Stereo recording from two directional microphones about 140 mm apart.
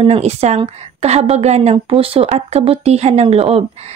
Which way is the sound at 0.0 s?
45° right (ahead or behind).